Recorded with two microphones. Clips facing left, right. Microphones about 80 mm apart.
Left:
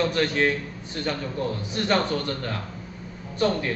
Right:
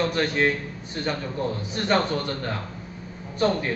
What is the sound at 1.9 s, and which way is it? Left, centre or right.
Speech, right.